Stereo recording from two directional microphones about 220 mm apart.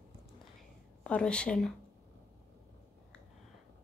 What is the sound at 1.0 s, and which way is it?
Speech, 5° left (ahead or behind).